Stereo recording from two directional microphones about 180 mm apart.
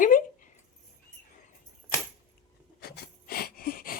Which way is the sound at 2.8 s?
60° left (ahead or behind).